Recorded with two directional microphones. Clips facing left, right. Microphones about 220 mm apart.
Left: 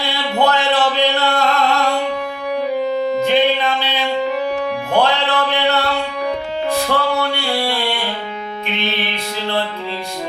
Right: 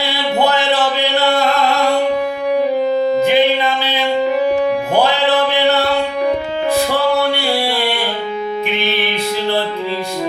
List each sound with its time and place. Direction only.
0.3 s music: 5° right (ahead or behind)
2.9 s music: 35° right (ahead or behind)
3.2 s music: 5° right (ahead or behind)
4.9 s a sound: 5° right (ahead or behind)
6.7 s music: 5° right (ahead or behind)